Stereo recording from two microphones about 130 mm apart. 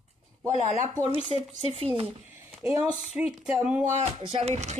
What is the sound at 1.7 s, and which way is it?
Speech, 45° right (ahead or behind).